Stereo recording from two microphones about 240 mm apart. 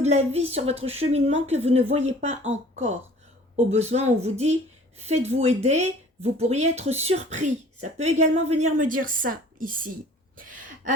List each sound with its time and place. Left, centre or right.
0.0 s speech: right
2.7 s speech: right
3.5 s speech: right
10.3 s gasp: right